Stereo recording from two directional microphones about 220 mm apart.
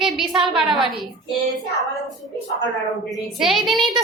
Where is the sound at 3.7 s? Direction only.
20° right (ahead or behind).